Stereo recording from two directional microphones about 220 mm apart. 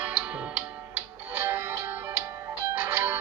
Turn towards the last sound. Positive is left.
turn(degrees=-10)  # may be behind; listen again after turning